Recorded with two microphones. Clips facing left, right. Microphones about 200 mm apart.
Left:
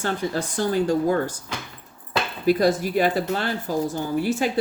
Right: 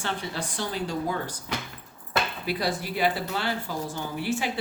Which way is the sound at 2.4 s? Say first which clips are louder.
Left 10 dB; 45° left (ahead or behind).